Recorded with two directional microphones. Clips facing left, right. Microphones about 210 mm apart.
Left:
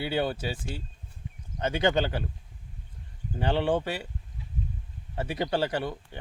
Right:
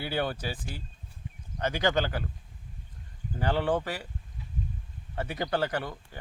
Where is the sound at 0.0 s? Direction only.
25° left (ahead or behind).